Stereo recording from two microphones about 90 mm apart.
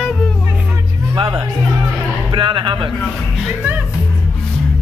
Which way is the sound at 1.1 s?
65° right (ahead or behind).